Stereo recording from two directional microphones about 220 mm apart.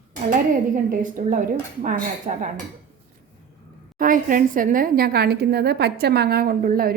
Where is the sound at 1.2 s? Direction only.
35° right (ahead or behind).